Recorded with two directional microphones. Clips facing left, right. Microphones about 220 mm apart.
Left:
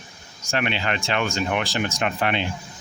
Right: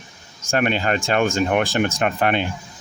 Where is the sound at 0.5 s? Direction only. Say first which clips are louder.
Right 5 dB; 45° right (ahead or behind).